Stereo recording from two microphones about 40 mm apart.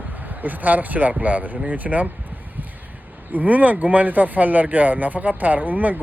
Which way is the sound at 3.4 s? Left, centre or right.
Right.